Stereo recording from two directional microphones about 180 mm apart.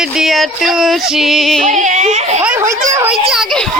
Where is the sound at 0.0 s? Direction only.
5° right (ahead or behind).